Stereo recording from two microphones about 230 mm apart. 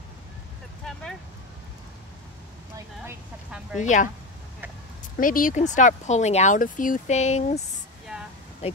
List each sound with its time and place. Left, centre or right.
3.7 s speech: left
5.1 s speech: left